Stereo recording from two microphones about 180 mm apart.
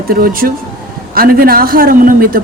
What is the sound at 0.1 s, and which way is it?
A woman's voice, 55° right (ahead or behind).